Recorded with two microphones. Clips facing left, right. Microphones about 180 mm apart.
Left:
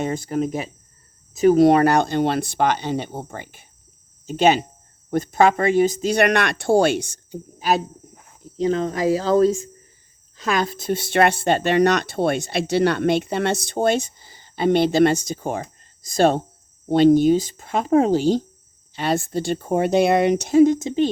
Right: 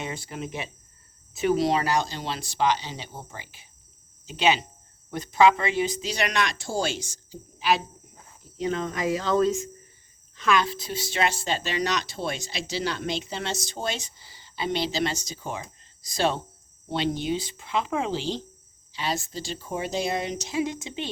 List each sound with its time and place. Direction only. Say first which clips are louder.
0.0 s speech: left 11 dB; 45° left (ahead or behind); by 7.3 s 60° left (ahead or behind)
7.6 s speech: left 3 dB; 45° left (ahead or behind)
8.5 s speech: left 7 dB; 35° left (ahead or behind)